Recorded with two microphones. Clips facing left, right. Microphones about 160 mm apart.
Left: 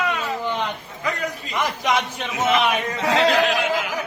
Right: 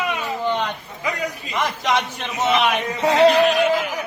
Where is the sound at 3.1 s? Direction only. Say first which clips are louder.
Right 5 dB; 90° left.